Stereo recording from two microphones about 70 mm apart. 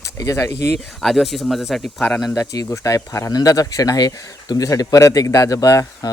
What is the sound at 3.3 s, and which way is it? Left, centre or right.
Speech, left.